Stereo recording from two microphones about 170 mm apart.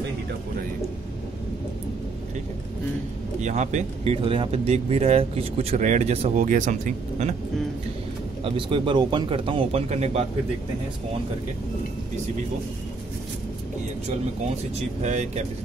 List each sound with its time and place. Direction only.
3.3 s speech: 45° right (ahead or behind)
8.5 s speech: 30° right (ahead or behind)
15.0 s speech: 40° right (ahead or behind)